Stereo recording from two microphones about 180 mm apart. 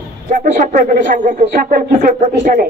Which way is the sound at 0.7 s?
45° right (ahead or behind).